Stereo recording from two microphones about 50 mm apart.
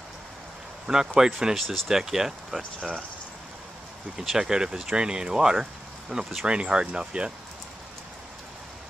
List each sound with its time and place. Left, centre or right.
0.8 s speech: centre
4.2 s speech: centre